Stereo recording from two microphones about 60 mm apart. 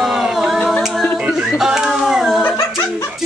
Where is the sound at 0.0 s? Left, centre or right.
Centre.